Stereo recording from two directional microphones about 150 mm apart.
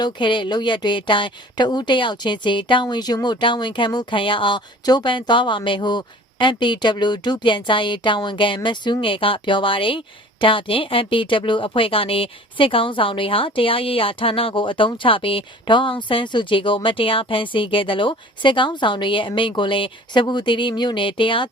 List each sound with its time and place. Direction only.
0.0 s speech: 30° left (ahead or behind)